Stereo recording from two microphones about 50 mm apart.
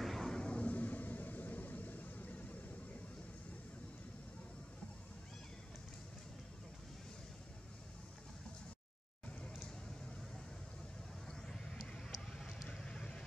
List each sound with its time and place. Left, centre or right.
0.0 s a sound: centre
0.4 s vehicle: left
11.2 s vehicle: centre